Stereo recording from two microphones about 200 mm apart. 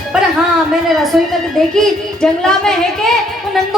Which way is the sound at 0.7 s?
Centre (ahead or behind).